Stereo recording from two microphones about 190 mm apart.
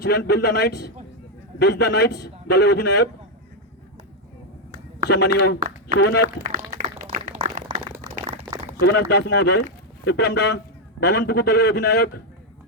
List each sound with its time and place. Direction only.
0.0 s a man's voice: 60° left (ahead or behind)
5.0 s a man's voice: 60° left (ahead or behind)
5.5 s speech: 40° right (ahead or behind)
6.0 s a man's voice: 65° left (ahead or behind)
6.7 s a sound: 40° right (ahead or behind)
8.8 s a man's voice: 60° left (ahead or behind)